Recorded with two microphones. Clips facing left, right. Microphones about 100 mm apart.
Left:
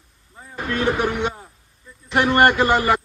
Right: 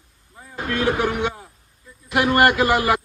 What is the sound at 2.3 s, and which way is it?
Speech, 30° left (ahead or behind).